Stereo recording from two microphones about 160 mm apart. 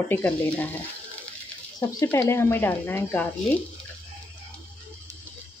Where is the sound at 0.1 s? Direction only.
10° left (ahead or behind).